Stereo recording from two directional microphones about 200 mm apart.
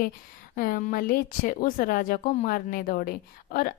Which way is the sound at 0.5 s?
45° left (ahead or behind).